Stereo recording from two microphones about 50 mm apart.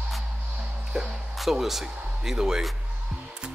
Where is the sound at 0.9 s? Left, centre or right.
Centre.